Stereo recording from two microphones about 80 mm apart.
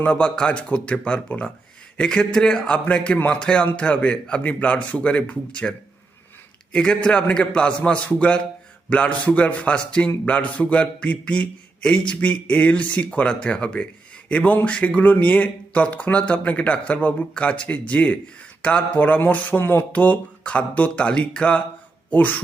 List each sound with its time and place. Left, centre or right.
0.0 s speech: centre
6.7 s speech: centre